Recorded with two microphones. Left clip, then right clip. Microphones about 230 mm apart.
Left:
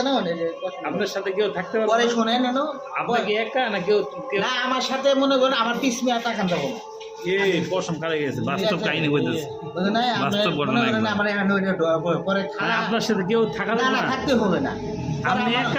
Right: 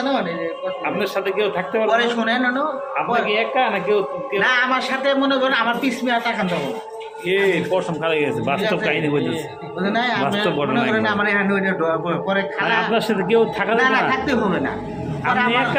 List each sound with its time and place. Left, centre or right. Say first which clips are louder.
0.9 s a man's voice: right 1 dB; centre
7.3 s a man's voice: right 4 dB; centre
10.4 s a man's voice: right 2 dB; left
12.6 s a man's voice: right 4 dB; centre